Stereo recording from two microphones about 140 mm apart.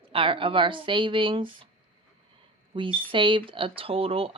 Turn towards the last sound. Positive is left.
turn(degrees=-40)  # may be behind; listen again after turning